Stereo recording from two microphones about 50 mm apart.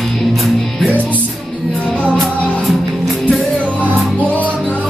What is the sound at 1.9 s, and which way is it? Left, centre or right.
Music, left.